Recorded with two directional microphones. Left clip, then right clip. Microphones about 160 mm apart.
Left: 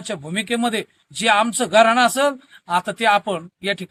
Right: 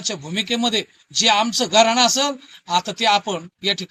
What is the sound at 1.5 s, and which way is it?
Speech, 35° left (ahead or behind).